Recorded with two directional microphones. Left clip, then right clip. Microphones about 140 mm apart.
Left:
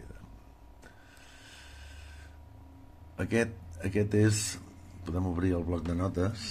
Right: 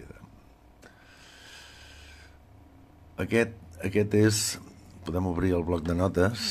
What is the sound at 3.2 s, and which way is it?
Speech, 20° right (ahead or behind).